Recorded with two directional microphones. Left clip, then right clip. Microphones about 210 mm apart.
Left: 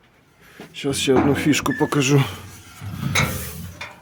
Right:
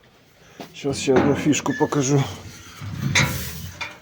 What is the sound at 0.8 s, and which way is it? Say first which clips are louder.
Speech: left 1 dB; 20° left (ahead or behind).